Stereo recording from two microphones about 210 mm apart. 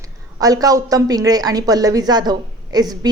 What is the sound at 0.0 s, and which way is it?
A woman's voice, 15° right (ahead or behind).